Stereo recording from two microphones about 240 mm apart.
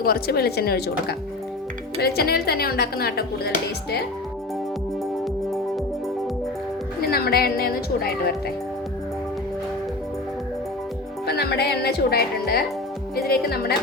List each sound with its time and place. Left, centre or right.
0.0 s speech: left
7.0 s speech: left
11.3 s speech: left